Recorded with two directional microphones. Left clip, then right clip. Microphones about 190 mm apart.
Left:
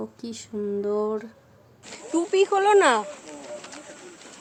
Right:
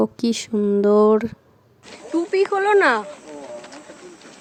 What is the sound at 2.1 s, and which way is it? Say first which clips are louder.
Speech: right 2 dB; 20° left (ahead or behind).